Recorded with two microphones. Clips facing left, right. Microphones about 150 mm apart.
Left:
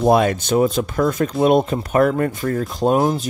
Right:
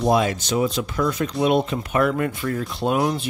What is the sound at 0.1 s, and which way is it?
Speech, 55° left (ahead or behind).